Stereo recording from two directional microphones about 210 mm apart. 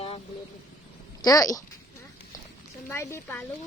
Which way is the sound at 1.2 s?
15° left (ahead or behind).